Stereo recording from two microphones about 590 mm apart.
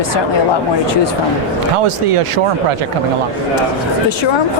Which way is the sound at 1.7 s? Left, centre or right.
Right.